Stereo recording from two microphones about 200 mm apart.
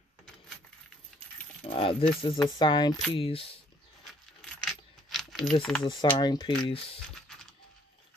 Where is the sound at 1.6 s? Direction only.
30° left (ahead or behind).